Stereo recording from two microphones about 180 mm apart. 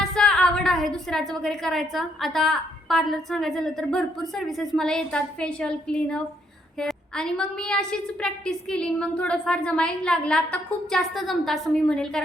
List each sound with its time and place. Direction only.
0.0 s a woman's voice: 5° left (ahead or behind)